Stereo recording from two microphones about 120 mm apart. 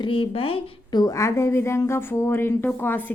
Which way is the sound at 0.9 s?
30° left (ahead or behind).